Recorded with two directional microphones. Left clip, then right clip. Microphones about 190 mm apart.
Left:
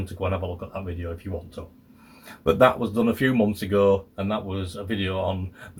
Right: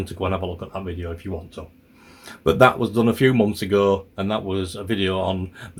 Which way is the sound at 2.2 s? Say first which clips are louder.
Right 3 dB; 45° right (ahead or behind).